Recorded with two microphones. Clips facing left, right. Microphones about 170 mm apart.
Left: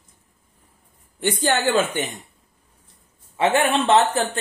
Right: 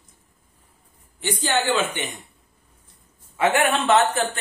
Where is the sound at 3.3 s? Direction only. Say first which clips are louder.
Left 1 dB; 30° left (ahead or behind).